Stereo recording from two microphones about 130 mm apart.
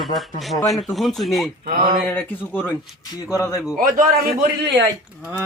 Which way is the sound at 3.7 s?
80° right.